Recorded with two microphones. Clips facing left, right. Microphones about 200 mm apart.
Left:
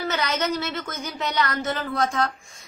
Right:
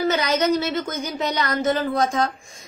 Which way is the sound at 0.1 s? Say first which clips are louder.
Right 5 dB; 20° right (ahead or behind).